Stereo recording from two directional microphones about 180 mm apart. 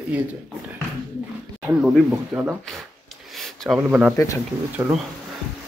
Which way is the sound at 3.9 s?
5° right (ahead or behind).